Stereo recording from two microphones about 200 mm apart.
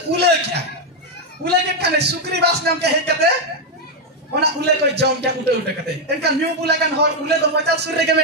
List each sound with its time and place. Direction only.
0.1 s a man's voice: 55° right (ahead or behind)
4.4 s a man's voice: 55° right (ahead or behind)